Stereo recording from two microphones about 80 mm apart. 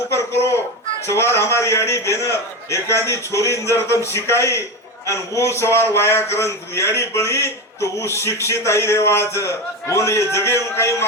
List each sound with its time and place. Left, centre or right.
1.0 s a man's voice: left